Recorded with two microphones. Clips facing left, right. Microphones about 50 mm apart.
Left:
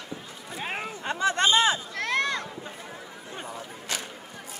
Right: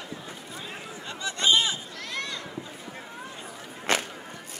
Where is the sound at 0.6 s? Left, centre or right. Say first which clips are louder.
Left 10 dB; left.